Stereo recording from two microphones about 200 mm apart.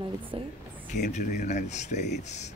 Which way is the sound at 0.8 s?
35° left (ahead or behind).